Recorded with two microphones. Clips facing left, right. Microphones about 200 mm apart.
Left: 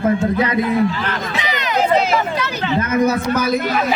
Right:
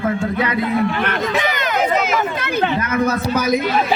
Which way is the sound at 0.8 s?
60° right (ahead or behind).